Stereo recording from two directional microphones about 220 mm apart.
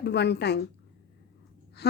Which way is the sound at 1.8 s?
50° left (ahead or behind).